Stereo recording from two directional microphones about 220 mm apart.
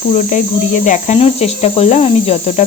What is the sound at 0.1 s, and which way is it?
Speech, 35° left (ahead or behind).